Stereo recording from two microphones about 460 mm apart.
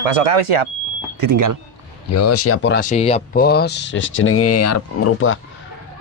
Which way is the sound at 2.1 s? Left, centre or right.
Left.